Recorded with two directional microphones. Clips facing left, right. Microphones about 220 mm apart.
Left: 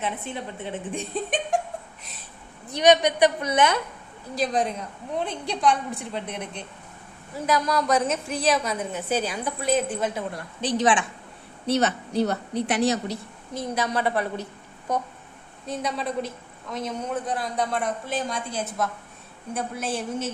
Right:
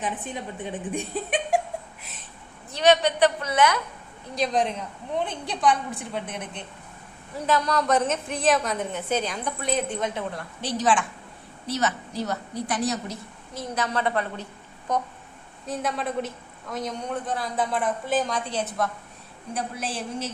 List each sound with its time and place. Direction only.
0.0 s a woman's voice: 15° right (ahead or behind)
2.7 s a woman's voice: 15° left (ahead or behind)
4.4 s a woman's voice: centre (ahead or behind)
7.4 s a woman's voice: 15° left (ahead or behind)
7.9 s a woman's voice: centre (ahead or behind)
10.6 s a woman's voice: 15° left (ahead or behind)
11.6 s a woman's voice: 60° left (ahead or behind)
12.5 s a woman's voice: 25° left (ahead or behind)
13.5 s a woman's voice: 15° left (ahead or behind)
15.6 s a woman's voice: centre (ahead or behind)
19.8 s a woman's voice: centre (ahead or behind)